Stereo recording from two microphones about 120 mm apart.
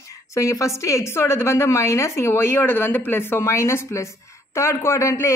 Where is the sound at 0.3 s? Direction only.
25° left (ahead or behind).